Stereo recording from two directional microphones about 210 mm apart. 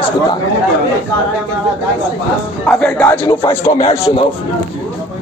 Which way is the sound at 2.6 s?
5° left (ahead or behind).